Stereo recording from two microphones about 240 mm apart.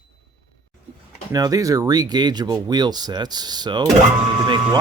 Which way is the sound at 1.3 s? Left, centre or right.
Centre.